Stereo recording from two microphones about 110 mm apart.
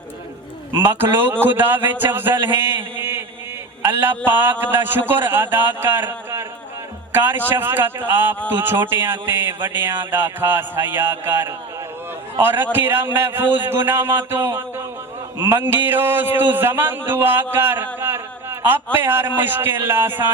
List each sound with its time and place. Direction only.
0.9 s speech: 20° right (ahead or behind)
18.0 s a sound: 20° right (ahead or behind)
19.4 s speech: 20° right (ahead or behind)